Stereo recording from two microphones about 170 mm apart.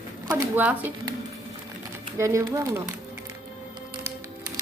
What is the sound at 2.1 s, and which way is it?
Speech, 20° right (ahead or behind).